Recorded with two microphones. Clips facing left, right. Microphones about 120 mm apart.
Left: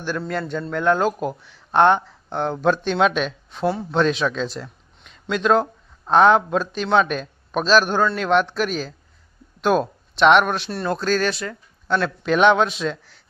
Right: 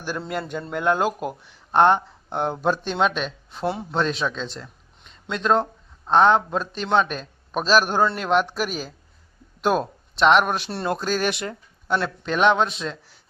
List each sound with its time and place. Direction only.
0.3 s a man's voice: 10° right (ahead or behind)
10.7 s speech: 25° right (ahead or behind)
10.9 s speech: 10° right (ahead or behind)
11.9 s a man's voice: 10° right (ahead or behind)